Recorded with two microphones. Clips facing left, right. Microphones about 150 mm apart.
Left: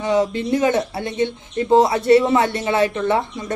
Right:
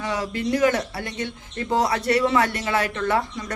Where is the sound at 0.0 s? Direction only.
25° left (ahead or behind).